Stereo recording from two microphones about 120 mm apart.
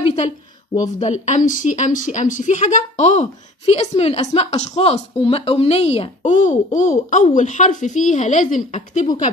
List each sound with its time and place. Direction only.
0.9 s speech: 80° left
3.0 s a woman's voice: 70° left (ahead or behind); by 9.0 s 90° left
9.0 s speech: 35° left (ahead or behind)